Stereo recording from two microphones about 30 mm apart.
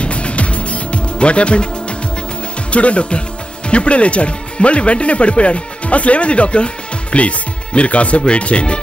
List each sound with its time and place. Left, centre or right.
0.0 s music: left
2.7 s speech: left